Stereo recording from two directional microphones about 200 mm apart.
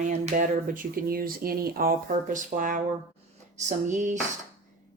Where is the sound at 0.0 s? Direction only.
40° right (ahead or behind).